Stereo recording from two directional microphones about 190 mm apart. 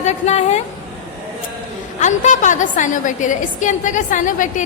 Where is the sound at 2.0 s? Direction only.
40° left (ahead or behind).